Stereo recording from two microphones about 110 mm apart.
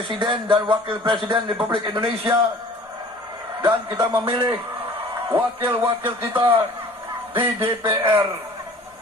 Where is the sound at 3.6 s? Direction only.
35° right (ahead or behind).